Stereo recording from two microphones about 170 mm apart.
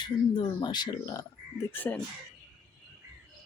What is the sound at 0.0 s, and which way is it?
Speech, 25° left (ahead or behind).